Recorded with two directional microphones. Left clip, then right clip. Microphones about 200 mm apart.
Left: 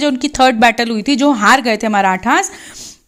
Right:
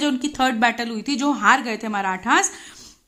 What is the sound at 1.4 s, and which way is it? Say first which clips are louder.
A woman's voice: left 4 dB; 40° left (ahead or behind).